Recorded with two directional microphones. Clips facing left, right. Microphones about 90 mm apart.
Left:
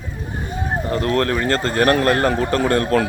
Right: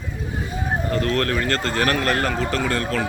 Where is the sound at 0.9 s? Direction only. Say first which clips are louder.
Left 3 dB; 30° left (ahead or behind).